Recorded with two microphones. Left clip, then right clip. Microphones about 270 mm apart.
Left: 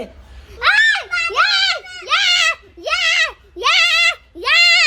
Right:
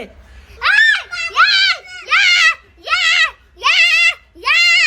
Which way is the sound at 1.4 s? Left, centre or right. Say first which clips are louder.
Right 5 dB; left.